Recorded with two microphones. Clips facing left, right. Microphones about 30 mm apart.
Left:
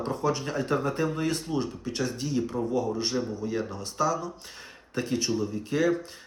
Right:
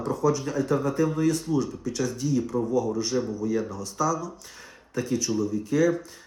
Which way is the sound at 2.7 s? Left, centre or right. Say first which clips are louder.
Right 2 dB; left.